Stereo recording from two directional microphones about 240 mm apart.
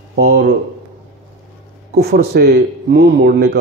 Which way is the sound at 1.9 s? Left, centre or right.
Right.